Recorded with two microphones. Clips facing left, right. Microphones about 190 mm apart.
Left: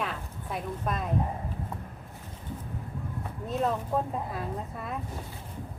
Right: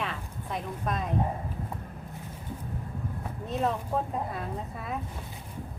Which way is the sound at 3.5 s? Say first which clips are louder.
Left 1 dB; centre (ahead or behind).